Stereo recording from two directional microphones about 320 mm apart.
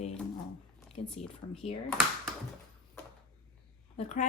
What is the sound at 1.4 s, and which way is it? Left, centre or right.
Speech, centre.